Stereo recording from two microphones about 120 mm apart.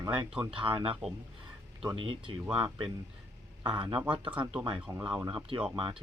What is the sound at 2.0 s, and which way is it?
Speech, 45° right (ahead or behind).